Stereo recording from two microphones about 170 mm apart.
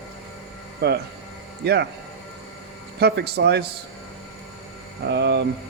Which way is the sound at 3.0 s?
70° right (ahead or behind).